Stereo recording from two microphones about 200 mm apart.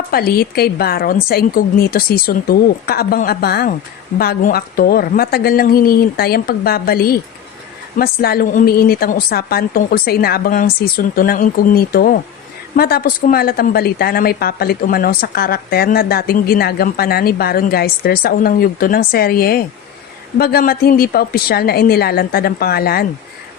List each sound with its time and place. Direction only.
0.1 s a woman's voice: 50° left (ahead or behind)